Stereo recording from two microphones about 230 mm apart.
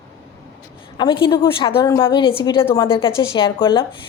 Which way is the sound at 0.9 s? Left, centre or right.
Centre.